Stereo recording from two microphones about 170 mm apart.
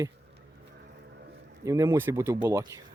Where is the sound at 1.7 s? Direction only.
15° right (ahead or behind).